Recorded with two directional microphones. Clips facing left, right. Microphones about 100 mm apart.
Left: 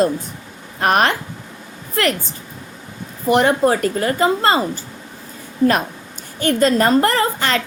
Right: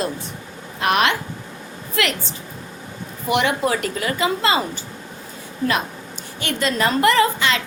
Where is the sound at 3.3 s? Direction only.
40° left (ahead or behind).